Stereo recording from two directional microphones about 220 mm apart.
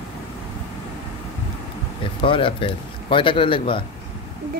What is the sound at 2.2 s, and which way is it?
Speech, 25° left (ahead or behind).